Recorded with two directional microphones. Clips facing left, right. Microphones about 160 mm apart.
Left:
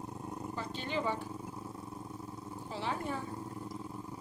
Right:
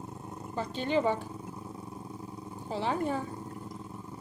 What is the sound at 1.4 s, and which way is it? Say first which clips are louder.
Vehicle: right 2 dB; 5° right (ahead or behind).